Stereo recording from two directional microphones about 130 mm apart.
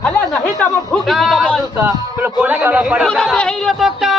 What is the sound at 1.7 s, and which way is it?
Speech, 15° right (ahead or behind).